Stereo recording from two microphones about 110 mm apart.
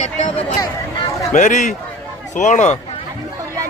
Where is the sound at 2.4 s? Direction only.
90° left.